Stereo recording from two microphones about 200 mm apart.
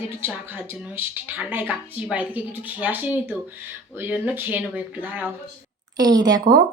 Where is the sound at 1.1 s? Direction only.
10° right (ahead or behind).